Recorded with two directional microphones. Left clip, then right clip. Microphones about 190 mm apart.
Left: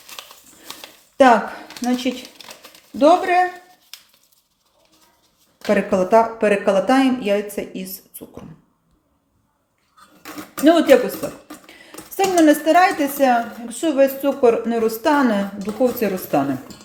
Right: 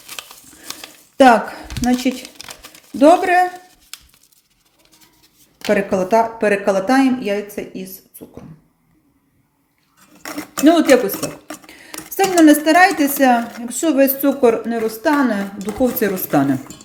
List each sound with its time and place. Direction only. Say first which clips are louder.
0.1 s a sound: right 4 dB; 20° right (ahead or behind)
5.6 s speech: right 1 dB; 10° right (ahead or behind)
10.6 s speech: right 1 dB; 15° right (ahead or behind)
14.7 s a woman's voice: even; centre (ahead or behind)
15.8 s speech: right 1 dB; 15° right (ahead or behind)